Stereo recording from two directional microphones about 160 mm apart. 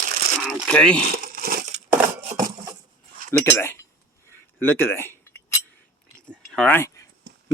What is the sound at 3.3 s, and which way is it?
Speech, 15° left (ahead or behind).